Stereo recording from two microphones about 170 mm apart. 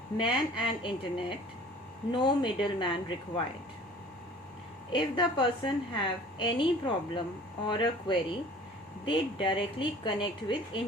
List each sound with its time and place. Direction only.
0.2 s speech: 30° left (ahead or behind)
4.9 s speech: 30° left (ahead or behind)